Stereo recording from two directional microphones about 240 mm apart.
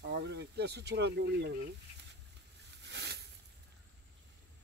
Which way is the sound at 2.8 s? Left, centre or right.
Right.